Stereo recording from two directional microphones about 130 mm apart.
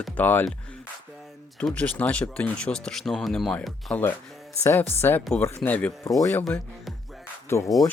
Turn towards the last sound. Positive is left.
turn(degrees=20)  # may be behind; listen again after turning